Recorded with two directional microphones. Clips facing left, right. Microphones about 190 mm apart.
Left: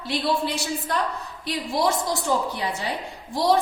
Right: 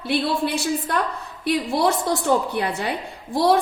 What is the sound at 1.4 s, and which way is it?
A woman's voice, 60° right (ahead or behind).